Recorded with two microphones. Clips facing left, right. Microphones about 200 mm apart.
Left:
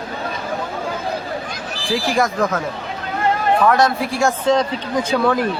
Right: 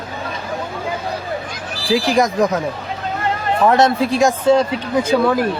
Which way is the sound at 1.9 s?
20° right (ahead or behind).